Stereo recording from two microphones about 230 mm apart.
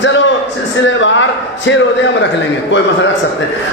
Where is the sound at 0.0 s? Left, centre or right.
Left.